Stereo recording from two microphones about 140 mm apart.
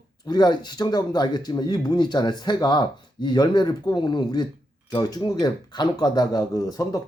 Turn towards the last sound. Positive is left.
turn(degrees=25)  # may be behind; listen again after turning